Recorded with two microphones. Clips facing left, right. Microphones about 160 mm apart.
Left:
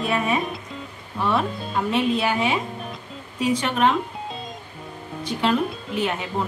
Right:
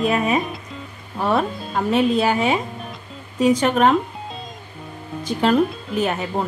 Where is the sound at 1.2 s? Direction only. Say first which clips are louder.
Right 3 dB; 45° right (ahead or behind).